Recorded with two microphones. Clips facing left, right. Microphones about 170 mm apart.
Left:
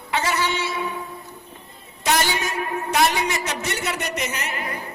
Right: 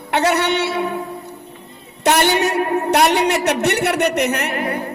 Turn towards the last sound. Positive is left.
turn(degrees=-60)  # may be behind; listen again after turning